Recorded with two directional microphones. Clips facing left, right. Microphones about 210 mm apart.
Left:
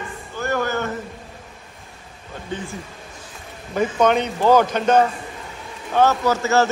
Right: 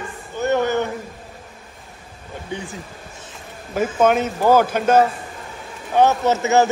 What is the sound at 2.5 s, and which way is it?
Speech, 15° right (ahead or behind).